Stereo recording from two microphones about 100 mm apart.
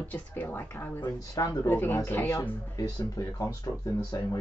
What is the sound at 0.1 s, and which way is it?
Speech, 15° left (ahead or behind).